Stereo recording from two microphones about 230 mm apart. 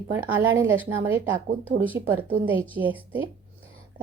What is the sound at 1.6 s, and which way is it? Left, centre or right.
Speech, right.